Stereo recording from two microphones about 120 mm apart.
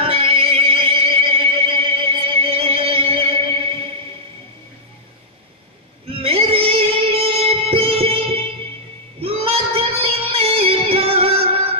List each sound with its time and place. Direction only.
0.0 s music: 50° right (ahead or behind)
6.0 s music: 50° right (ahead or behind)